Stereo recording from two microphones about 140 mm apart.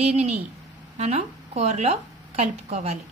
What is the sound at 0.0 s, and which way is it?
A woman's voice, 55° right (ahead or behind).